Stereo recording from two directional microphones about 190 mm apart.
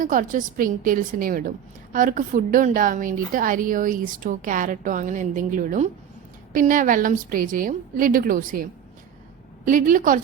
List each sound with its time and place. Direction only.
0.0 s a woman's voice: 45° right (ahead or behind)
9.6 s a woman's voice: 45° right (ahead or behind)